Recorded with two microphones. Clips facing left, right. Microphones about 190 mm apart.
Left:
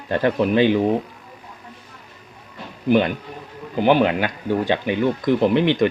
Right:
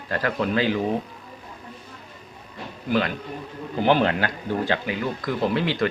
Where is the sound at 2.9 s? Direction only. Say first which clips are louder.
Left 6 dB; 20° left (ahead or behind).